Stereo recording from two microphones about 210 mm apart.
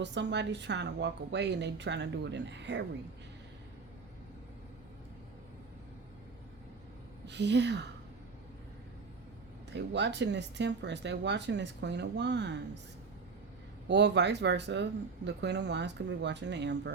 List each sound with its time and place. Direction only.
0.0 s speech: 55° right (ahead or behind)
7.3 s speech: 55° right (ahead or behind)
9.7 s speech: 55° right (ahead or behind)
13.8 s speech: 55° right (ahead or behind)